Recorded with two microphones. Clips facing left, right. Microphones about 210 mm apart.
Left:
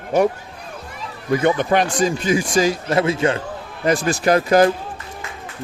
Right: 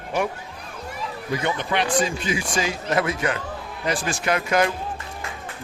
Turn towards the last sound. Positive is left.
turn(degrees=35)  # may be behind; listen again after turning